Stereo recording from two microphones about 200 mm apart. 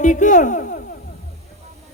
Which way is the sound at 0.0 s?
40° left (ahead or behind).